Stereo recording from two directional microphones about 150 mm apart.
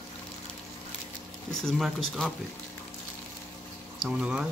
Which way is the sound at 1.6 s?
Centre (ahead or behind).